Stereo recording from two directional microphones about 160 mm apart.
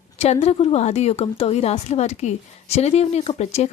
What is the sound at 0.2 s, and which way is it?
A woman's voice, 40° left (ahead or behind).